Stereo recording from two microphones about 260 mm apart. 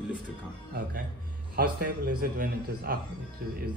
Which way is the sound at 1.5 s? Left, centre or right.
Right.